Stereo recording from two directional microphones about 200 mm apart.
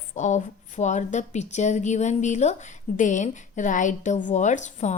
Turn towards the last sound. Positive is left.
turn(degrees=35)  # may be behind; listen again after turning